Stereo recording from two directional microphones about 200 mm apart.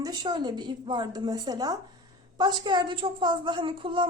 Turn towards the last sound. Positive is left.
turn(degrees=-25)  # may be behind; listen again after turning